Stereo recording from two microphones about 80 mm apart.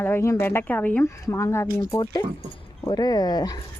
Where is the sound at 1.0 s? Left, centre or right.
Left.